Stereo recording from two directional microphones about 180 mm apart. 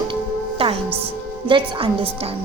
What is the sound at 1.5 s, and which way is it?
Speech, 25° right (ahead or behind).